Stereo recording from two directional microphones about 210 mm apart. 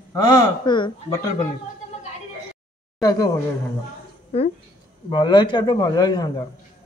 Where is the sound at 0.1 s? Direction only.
20° left (ahead or behind).